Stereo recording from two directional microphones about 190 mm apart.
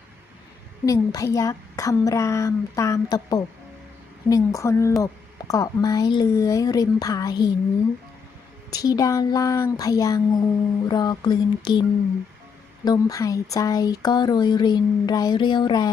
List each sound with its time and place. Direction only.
0.9 s a woman's voice: 20° left (ahead or behind)
8.7 s speech: 20° left (ahead or behind)